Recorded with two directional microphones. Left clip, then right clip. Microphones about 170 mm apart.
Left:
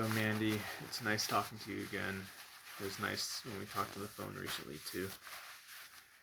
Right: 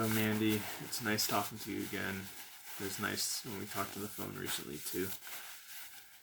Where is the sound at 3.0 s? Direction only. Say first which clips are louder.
Right 2 dB; 20° right (ahead or behind).